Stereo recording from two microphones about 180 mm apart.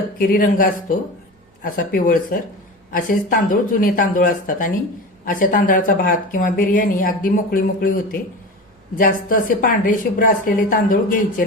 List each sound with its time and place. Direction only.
0.2 s speech: 50° left (ahead or behind)